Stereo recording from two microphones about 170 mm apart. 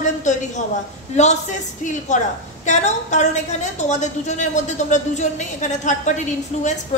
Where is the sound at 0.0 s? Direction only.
45° left (ahead or behind).